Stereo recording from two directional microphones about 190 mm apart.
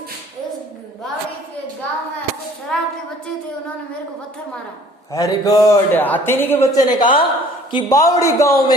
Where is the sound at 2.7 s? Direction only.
5° left (ahead or behind).